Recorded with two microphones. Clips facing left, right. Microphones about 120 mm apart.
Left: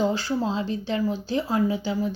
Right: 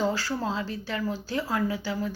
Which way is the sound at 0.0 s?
20° left (ahead or behind).